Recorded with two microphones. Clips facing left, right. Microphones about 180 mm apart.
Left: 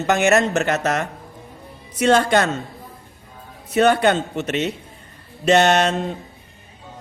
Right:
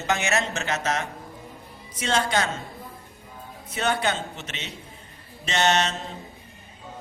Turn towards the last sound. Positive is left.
turn(degrees=55)  # may be behind; listen again after turning